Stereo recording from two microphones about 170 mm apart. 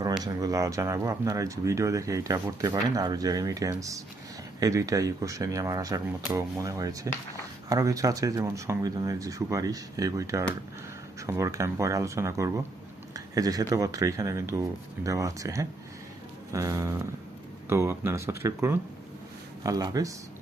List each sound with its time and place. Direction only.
0.2 s speech: 20° right (ahead or behind)